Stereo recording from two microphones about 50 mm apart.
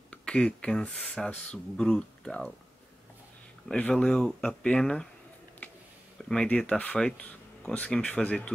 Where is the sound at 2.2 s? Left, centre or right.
Centre.